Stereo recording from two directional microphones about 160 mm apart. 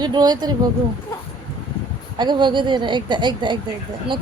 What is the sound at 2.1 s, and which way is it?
Speech, 30° right (ahead or behind).